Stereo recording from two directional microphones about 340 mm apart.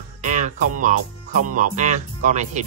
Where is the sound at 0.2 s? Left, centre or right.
Right.